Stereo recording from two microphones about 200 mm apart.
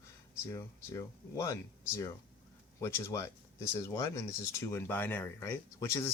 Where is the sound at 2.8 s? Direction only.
15° left (ahead or behind).